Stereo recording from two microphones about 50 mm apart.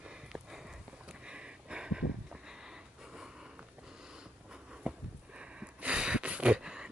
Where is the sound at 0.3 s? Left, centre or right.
Centre.